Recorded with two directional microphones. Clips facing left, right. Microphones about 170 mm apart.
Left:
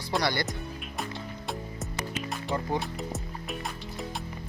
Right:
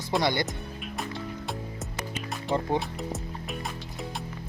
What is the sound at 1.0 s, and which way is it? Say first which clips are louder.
Music: right 2 dB; centre (ahead or behind).